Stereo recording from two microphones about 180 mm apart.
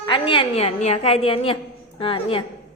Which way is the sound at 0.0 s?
25° left (ahead or behind).